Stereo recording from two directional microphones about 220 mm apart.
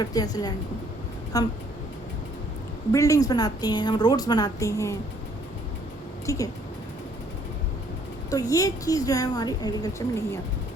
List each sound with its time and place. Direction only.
0.0 s a woman's voice: 15° left (ahead or behind)
2.9 s a woman's voice: 15° left (ahead or behind)
6.2 s speech: 15° left (ahead or behind)
8.3 s a woman's voice: 15° left (ahead or behind)